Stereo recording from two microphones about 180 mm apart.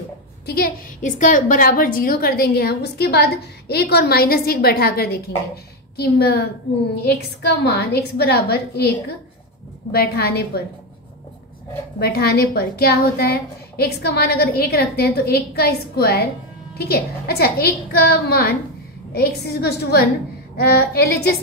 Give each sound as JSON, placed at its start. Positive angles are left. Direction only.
{"t": 0.5, "sound": "a woman's voice", "side_deg": 55}
{"t": 9.9, "sound": "a woman's voice", "side_deg": 60}
{"t": 12.0, "sound": "a woman's voice", "side_deg": 65}